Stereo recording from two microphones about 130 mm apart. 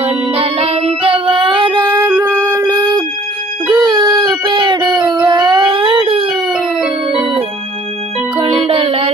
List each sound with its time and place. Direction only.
0.0 s music: 50° right (ahead or behind); by 3.0 s 25° right (ahead or behind)
3.6 s dog: 30° right (ahead or behind)
6.5 s music: centre (ahead or behind)
8.4 s music: 50° right (ahead or behind)